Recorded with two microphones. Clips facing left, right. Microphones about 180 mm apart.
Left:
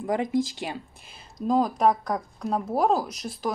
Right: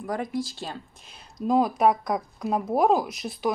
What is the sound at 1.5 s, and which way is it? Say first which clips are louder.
A woman's voice: right 1 dB; 5° right (ahead or behind).